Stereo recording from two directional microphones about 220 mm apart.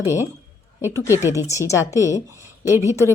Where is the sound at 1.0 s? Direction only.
15° left (ahead or behind).